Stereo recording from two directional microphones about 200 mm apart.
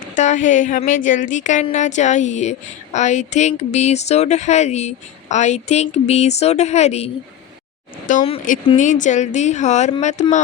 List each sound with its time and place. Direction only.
0.2 s a woman's voice: 40° left (ahead or behind)